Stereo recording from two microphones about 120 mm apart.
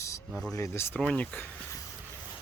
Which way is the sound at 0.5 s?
25° left (ahead or behind).